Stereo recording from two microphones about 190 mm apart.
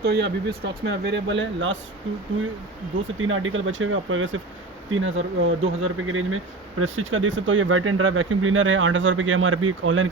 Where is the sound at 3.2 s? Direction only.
90° right.